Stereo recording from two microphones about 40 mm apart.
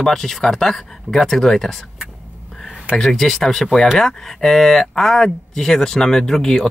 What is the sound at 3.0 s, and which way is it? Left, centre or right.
Speech, centre.